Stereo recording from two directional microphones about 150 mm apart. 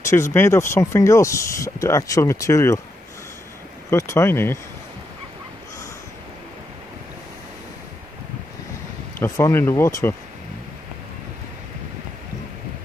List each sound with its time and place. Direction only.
0.0 s speech: 20° left (ahead or behind)
3.9 s speech: 20° left (ahead or behind)
9.2 s speech: 20° left (ahead or behind)